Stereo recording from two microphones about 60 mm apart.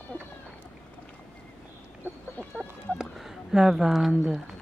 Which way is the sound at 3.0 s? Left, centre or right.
Centre.